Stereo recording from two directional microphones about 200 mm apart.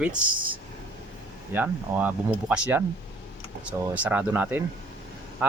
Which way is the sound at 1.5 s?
10° right (ahead or behind).